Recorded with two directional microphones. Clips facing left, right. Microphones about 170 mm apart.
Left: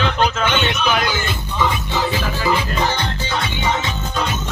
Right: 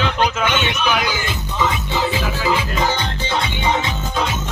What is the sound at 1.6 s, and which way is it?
Music, 10° right (ahead or behind).